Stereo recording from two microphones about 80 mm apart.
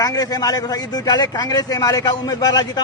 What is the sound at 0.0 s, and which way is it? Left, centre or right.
A man's voice, left.